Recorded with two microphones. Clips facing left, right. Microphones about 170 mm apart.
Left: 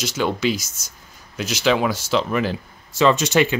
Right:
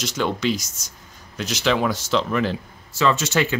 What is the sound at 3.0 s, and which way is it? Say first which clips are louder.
Speech: left 4 dB; 20° left (ahead or behind).